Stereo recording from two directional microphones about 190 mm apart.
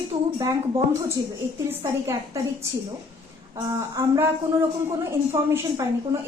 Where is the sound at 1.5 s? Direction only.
15° right (ahead or behind).